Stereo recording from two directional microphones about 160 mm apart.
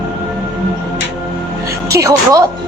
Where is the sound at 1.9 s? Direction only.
20° right (ahead or behind).